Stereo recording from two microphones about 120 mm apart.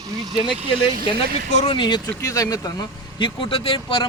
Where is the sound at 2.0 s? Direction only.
25° left (ahead or behind).